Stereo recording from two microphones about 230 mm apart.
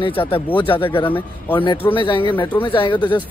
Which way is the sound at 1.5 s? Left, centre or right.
Left.